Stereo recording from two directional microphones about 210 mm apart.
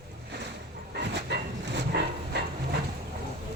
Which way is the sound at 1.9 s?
50° right (ahead or behind).